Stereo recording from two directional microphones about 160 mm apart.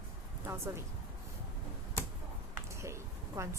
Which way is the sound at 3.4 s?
15° right (ahead or behind).